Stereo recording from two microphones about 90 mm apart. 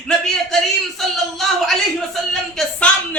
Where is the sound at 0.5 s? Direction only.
Centre (ahead or behind).